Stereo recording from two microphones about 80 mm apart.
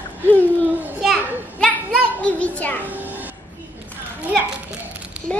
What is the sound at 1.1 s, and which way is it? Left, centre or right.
A child's voice, centre.